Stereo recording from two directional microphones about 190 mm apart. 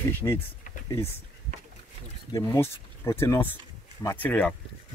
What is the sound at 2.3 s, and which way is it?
Speech, 15° left (ahead or behind).